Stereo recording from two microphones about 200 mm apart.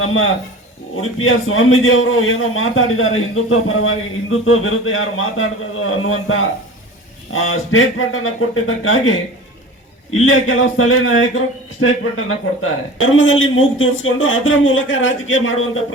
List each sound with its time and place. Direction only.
0.0 s a man's voice: 90° left